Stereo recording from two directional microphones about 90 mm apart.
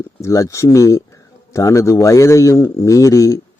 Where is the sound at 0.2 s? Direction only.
35° left (ahead or behind).